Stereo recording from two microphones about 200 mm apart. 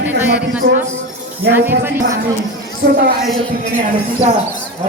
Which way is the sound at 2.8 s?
55° right (ahead or behind).